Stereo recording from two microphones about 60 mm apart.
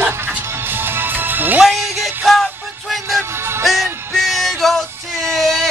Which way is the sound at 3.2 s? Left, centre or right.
Right.